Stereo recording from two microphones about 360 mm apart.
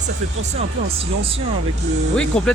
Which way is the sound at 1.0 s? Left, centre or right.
Centre.